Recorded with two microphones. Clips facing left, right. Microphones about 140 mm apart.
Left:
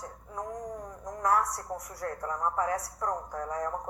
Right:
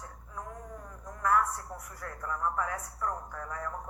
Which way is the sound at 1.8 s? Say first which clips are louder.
Left 3 dB; 40° left (ahead or behind).